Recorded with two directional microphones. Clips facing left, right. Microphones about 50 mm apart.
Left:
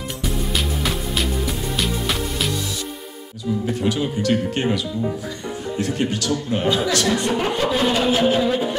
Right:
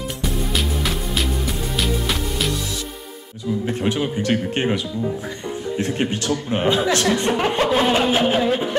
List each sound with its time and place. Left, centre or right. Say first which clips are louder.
0.4 s music: right 1 dB; centre
3.6 s speech: even; right